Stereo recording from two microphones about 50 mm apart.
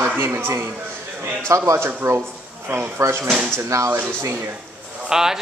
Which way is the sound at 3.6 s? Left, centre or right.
Right.